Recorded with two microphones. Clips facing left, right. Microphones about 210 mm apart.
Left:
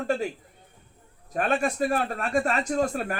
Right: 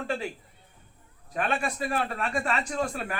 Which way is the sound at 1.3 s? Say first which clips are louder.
Left 4 dB; 45° left (ahead or behind).